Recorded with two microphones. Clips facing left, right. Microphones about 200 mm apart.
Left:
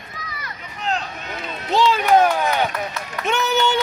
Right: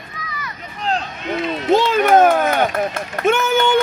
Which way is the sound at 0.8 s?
35° right (ahead or behind).